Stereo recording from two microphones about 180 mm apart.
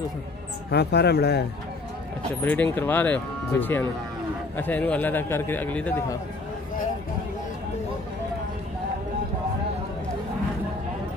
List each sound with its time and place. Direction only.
0.7 s speech: 65° left (ahead or behind)
2.4 s a man's voice: 10° left (ahead or behind)